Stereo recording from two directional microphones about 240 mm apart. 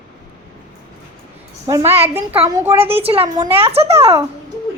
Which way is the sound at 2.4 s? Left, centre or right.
Centre.